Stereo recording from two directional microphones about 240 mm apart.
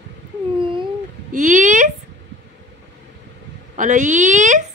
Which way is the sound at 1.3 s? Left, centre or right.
Right.